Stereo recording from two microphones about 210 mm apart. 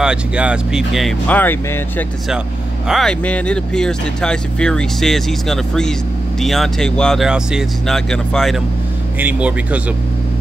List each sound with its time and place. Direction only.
0.0 s speech: 5° right (ahead or behind)